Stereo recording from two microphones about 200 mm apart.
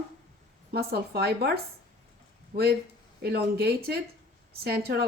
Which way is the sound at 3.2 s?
50° right (ahead or behind).